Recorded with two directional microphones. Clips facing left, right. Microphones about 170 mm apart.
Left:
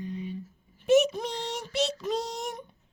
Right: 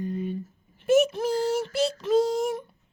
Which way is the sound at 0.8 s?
Centre (ahead or behind).